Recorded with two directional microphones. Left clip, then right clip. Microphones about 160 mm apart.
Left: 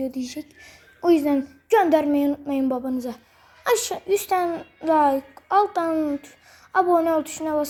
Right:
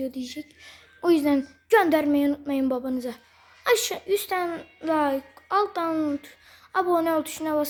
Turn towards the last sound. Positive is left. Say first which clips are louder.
# left 2 dB
turn(degrees=-15)  # may be behind; listen again after turning